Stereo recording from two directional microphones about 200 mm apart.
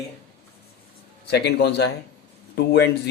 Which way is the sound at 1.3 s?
55° left (ahead or behind).